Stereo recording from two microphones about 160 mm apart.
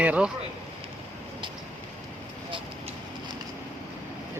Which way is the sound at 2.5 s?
30° right (ahead or behind).